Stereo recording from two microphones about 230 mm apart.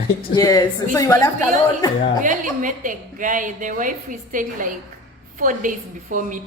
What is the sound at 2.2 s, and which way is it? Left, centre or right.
A woman's voice, right.